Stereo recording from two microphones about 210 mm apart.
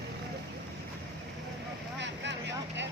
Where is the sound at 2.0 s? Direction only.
55° right (ahead or behind).